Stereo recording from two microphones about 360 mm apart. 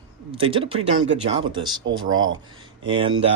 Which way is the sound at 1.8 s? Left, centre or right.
Right.